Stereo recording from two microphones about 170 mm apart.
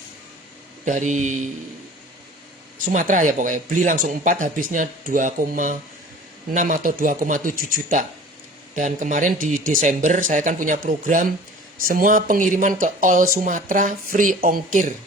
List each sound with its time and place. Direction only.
0.9 s speech: 45° right (ahead or behind)
2.7 s speech: 50° right (ahead or behind)